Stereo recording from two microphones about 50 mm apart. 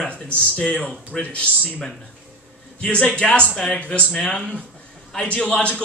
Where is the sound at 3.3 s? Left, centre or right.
Left.